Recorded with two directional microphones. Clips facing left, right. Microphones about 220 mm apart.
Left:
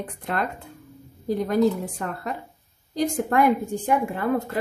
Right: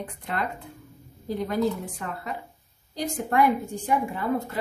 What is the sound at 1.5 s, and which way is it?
Speech, 50° left (ahead or behind).